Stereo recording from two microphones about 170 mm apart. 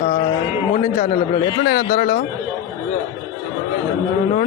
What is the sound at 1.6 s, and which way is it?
Speech, 90° left.